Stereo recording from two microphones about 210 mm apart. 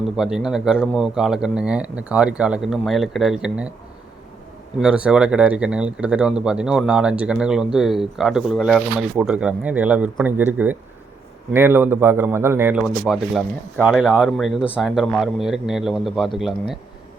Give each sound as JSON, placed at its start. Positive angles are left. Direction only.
{"t": 0.2, "sound": "speech", "side_deg": -5}
{"t": 4.8, "sound": "speech", "side_deg": -5}